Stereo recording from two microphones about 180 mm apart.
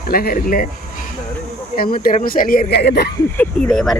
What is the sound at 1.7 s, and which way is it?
Speech, 55° left (ahead or behind).